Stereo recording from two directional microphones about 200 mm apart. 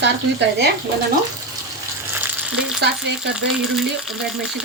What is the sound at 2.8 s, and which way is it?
Speech, 55° right (ahead or behind).